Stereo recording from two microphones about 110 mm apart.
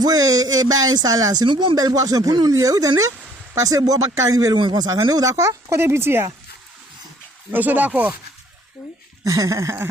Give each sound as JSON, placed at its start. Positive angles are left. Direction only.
{"t": 0.0, "sound": "speech", "side_deg": -35}
{"t": 4.5, "sound": "speech", "side_deg": -45}
{"t": 7.5, "sound": "speech", "side_deg": -15}
{"t": 9.2, "sound": "a sound", "side_deg": -30}